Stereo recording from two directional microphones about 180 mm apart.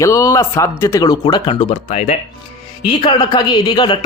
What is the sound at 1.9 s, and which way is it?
Speech, 40° left (ahead or behind).